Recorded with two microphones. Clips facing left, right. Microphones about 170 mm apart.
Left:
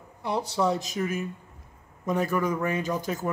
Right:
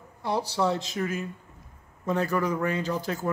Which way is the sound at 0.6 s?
15° left (ahead or behind).